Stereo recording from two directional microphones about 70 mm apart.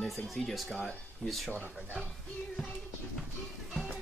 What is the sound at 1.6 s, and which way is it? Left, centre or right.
Speech, centre.